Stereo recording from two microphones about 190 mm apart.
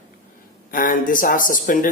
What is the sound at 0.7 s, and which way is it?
Speech, 45° left (ahead or behind).